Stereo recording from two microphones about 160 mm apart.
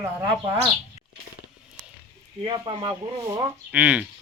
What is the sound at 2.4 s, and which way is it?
Speech, 30° right (ahead or behind).